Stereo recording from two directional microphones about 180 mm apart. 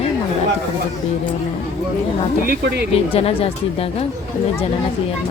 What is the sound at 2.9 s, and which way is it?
A woman's voice, 30° left (ahead or behind).